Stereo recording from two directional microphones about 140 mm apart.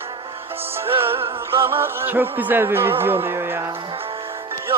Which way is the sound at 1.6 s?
15° right (ahead or behind).